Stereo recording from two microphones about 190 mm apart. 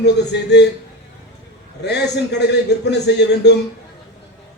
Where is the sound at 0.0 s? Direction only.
60° left (ahead or behind).